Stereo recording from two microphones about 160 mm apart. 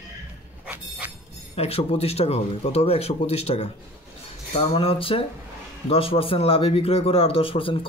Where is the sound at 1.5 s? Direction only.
40° left (ahead or behind).